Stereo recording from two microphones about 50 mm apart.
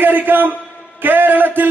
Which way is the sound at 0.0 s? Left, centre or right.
Right.